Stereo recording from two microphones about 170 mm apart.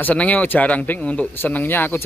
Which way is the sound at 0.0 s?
10° left (ahead or behind).